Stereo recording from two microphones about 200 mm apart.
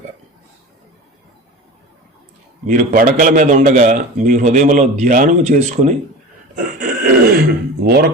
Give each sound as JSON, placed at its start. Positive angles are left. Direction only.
{"t": 2.6, "sound": "a man's voice", "side_deg": -45}
{"t": 6.6, "sound": "grunt", "side_deg": -45}
{"t": 7.9, "sound": "speech", "side_deg": -50}